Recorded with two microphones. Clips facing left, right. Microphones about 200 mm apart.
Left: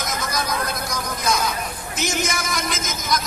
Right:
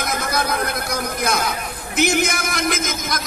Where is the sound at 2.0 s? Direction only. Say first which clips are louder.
Right 6 dB; 60° right (ahead or behind).